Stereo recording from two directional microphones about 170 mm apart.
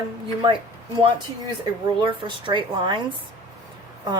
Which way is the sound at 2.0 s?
30° right (ahead or behind).